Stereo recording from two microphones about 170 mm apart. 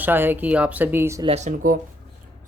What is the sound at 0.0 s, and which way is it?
Speech, 10° right (ahead or behind).